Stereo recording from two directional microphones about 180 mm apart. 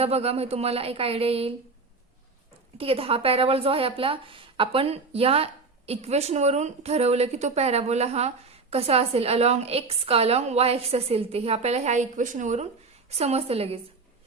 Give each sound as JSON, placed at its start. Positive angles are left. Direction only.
{"t": 0.0, "sound": "a woman's voice", "side_deg": -35}
{"t": 2.7, "sound": "a woman's voice", "side_deg": -30}